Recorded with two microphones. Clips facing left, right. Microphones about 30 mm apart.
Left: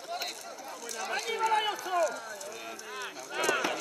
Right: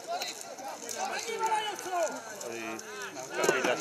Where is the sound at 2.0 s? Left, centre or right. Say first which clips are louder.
Left 2 dB; left.